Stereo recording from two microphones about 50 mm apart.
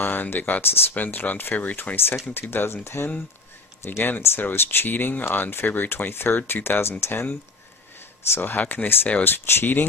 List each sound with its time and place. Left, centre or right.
0.0 s speech: left
0.9 s speech: left
2.3 s speech: left
4.2 s speech: left
8.4 s speech: left